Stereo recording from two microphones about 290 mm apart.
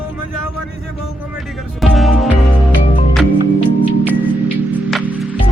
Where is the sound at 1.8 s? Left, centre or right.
Centre.